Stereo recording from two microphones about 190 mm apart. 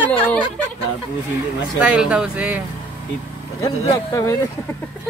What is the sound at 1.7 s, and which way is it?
Speech, 5° right (ahead or behind).